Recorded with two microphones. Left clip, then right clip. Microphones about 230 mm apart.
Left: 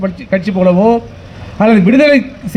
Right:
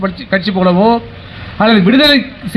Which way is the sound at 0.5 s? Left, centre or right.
Left.